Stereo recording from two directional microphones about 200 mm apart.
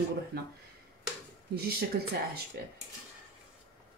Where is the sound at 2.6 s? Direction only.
50° right (ahead or behind).